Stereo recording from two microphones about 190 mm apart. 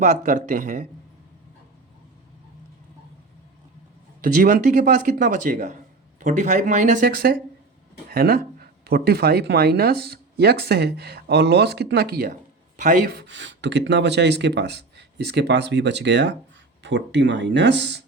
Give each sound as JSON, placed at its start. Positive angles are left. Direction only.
{"t": 0.0, "sound": "speech", "side_deg": -40}
{"t": 4.2, "sound": "speech", "side_deg": -45}